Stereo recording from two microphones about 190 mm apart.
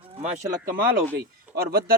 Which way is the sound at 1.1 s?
55° right (ahead or behind).